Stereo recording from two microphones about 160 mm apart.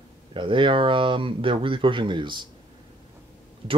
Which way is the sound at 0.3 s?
30° right (ahead or behind).